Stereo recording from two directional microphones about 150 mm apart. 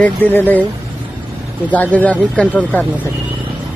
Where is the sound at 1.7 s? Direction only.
10° left (ahead or behind).